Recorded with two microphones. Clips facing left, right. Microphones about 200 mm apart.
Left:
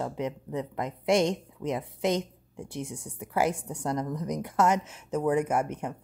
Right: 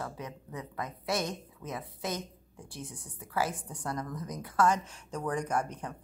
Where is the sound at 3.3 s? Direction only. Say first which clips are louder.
Left 6 dB; 25° left (ahead or behind).